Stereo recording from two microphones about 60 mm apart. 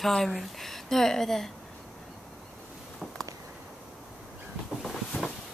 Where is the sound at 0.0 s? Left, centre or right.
Centre.